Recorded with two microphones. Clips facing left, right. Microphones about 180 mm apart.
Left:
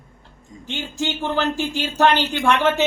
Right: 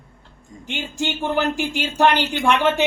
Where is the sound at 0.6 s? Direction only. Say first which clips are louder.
Even; 15° right (ahead or behind).